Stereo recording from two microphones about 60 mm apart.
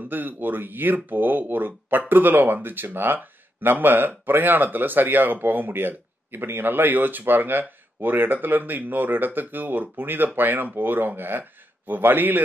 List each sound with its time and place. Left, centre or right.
0.1 s speech: right